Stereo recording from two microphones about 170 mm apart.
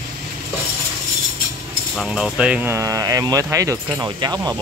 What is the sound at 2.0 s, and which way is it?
Speech, centre (ahead or behind).